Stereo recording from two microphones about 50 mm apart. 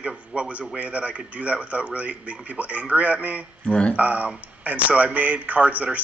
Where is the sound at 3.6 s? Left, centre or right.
Centre.